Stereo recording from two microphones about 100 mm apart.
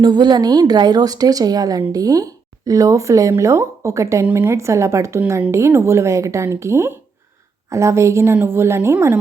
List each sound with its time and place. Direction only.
0.0 s speech: 45° right (ahead or behind); by 9.1 s 25° right (ahead or behind)